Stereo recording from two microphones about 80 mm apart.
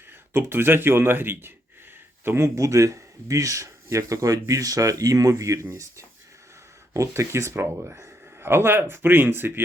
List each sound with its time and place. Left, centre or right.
0.3 s speech: right